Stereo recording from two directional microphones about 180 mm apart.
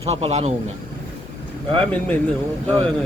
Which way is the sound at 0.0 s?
35° right (ahead or behind).